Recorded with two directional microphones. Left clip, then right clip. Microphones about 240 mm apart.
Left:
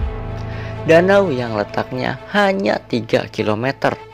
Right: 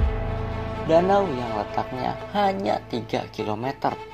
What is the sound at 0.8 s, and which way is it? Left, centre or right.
Speech, left.